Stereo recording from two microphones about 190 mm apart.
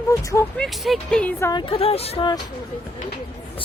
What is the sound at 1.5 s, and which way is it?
Speech, 25° left (ahead or behind).